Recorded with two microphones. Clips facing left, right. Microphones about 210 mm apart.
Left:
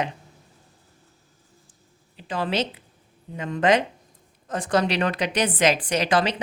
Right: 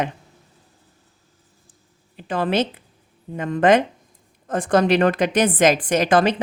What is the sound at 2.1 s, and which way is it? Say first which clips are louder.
A woman's voice: right 5 dB; 55° right (ahead or behind).